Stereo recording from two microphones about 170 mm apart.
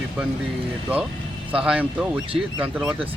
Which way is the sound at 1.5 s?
5° right (ahead or behind).